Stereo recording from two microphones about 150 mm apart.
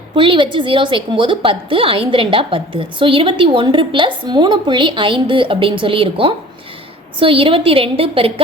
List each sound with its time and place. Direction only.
0.2 s a woman's voice: 35° right (ahead or behind)